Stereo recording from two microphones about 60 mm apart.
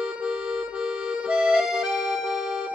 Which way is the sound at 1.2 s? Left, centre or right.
Centre.